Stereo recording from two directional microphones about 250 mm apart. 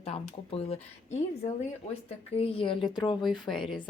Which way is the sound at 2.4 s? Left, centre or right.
Left.